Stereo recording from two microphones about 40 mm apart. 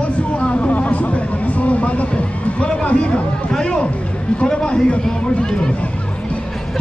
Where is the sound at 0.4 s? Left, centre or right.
Left.